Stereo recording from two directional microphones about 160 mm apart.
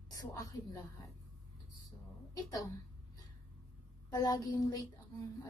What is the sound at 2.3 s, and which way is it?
Speech, 20° left (ahead or behind).